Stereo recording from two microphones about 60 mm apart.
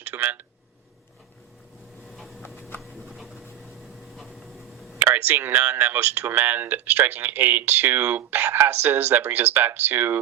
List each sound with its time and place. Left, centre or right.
0.0 s speech: right
2.0 s a sound: centre
4.9 s speech: right